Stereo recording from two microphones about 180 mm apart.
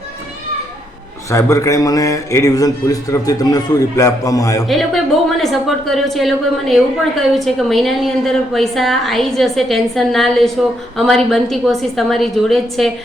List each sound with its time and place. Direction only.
1.3 s speech: 15° left (ahead or behind)
4.6 s a woman's voice: centre (ahead or behind)